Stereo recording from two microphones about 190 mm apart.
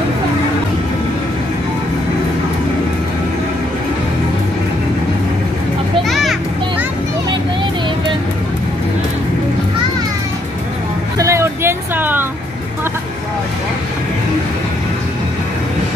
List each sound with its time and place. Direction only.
6.0 s children playing: centre (ahead or behind)
11.1 s vehicle: 15° right (ahead or behind)